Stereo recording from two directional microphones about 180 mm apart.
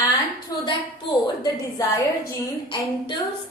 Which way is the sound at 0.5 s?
20° left (ahead or behind).